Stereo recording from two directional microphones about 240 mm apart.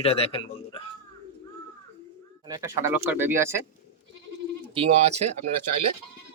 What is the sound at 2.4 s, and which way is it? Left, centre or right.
Speech, centre.